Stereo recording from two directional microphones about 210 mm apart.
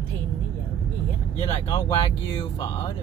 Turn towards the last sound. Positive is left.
turn(degrees=25)  # may be behind; listen again after turning